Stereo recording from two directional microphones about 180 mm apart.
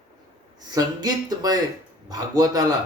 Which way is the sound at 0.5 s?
20° right (ahead or behind).